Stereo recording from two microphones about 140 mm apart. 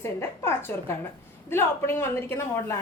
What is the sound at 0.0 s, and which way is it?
A woman's voice, 20° left (ahead or behind).